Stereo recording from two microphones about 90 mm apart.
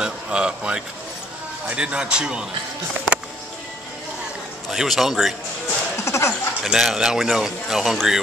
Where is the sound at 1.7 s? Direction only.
10° right (ahead or behind).